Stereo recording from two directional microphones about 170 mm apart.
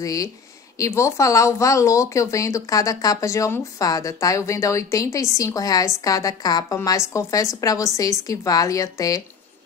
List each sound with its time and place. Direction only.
0.0 s speech: 20° left (ahead or behind)